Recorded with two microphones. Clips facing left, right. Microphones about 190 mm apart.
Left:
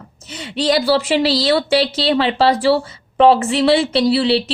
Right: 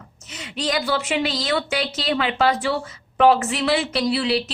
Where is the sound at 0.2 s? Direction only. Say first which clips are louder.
Left 7 dB; 30° left (ahead or behind).